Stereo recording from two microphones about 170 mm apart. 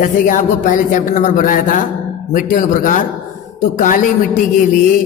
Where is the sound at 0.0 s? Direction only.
50° left (ahead or behind).